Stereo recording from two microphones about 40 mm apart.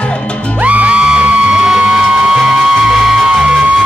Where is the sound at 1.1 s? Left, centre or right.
Right.